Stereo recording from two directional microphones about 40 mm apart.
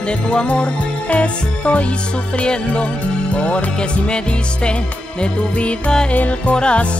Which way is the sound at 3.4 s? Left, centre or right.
Left.